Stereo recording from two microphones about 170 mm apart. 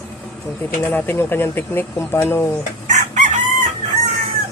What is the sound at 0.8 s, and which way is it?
Speech, 15° left (ahead or behind).